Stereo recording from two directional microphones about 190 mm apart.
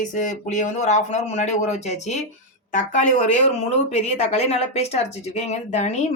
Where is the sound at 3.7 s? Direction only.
30° left (ahead or behind).